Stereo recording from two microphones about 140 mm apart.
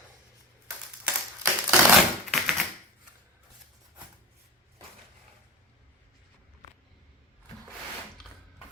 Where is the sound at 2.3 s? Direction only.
Centre (ahead or behind).